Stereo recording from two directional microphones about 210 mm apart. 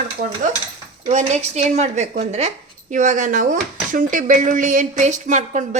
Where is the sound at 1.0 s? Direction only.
35° right (ahead or behind).